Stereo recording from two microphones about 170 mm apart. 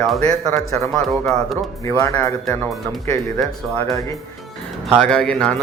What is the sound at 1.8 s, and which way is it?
Speech, 20° left (ahead or behind).